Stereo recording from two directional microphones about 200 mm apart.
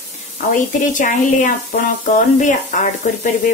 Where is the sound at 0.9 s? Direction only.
40° left (ahead or behind).